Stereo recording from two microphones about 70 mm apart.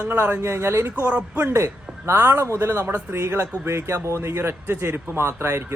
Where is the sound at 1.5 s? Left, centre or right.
Right.